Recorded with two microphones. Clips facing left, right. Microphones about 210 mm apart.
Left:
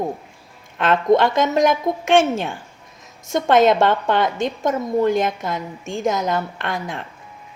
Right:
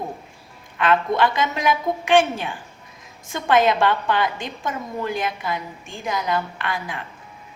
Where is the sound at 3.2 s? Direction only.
45° left (ahead or behind).